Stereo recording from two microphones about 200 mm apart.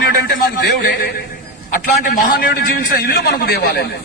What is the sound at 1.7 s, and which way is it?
A man's voice, 45° left (ahead or behind).